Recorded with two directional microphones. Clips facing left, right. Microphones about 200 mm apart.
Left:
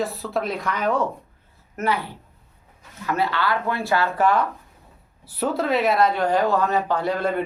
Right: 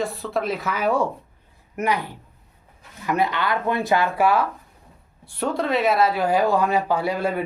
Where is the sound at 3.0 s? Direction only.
15° right (ahead or behind).